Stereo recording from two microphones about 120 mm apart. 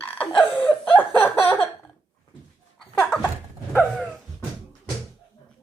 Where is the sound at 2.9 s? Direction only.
10° left (ahead or behind).